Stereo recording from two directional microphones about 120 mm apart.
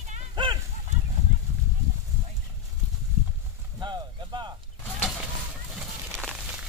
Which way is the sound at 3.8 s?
40° right (ahead or behind).